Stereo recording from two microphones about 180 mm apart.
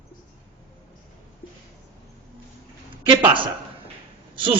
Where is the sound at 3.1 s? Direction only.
25° right (ahead or behind).